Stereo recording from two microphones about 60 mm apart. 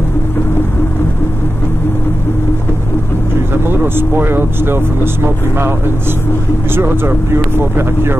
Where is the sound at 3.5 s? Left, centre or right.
Right.